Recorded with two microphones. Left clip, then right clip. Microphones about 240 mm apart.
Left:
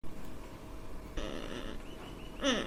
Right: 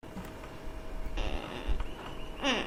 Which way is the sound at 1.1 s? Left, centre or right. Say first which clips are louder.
Right 2 dB; left.